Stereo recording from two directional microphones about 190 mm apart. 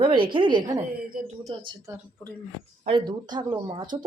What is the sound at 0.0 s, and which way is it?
Speech, 25° right (ahead or behind).